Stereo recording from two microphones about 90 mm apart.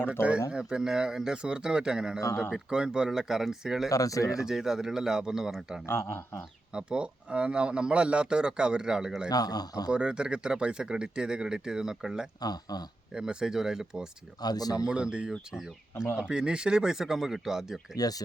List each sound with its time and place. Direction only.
0.5 s speech: 10° right (ahead or behind)
2.2 s speech: 25° left (ahead or behind)
2.5 s speech: 10° right (ahead or behind)
3.8 s speech: 40° left (ahead or behind)
4.4 s speech: 5° right (ahead or behind)
5.8 s speech: 30° left (ahead or behind)
6.7 s speech: 10° right (ahead or behind)
9.3 s speech: 45° left (ahead or behind)
9.9 s speech: 10° right (ahead or behind)
12.4 s speech: 45° left (ahead or behind)
13.1 s speech: 5° right (ahead or behind)
14.4 s speech: 45° left (ahead or behind)
14.8 s speech: 10° right (ahead or behind)
17.9 s speech: 45° left (ahead or behind)